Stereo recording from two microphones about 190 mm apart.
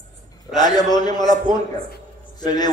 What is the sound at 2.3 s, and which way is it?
Speech, 20° left (ahead or behind).